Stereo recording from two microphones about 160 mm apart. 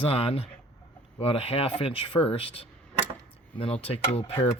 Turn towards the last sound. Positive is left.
turn(degrees=40)  # may be behind; listen again after turning